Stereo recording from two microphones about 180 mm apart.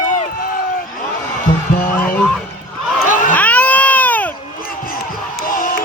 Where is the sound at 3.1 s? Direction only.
45° left (ahead or behind).